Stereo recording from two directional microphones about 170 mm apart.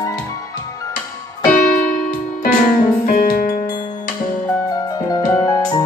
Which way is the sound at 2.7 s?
55° left (ahead or behind).